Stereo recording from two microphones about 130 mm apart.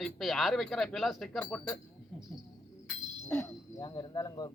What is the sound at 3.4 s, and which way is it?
Speech, 30° left (ahead or behind).